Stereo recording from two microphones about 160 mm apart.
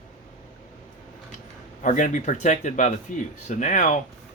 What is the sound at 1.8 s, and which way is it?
Speech, 50° left (ahead or behind).